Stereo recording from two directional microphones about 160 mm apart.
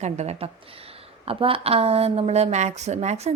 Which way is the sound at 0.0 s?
45° right (ahead or behind).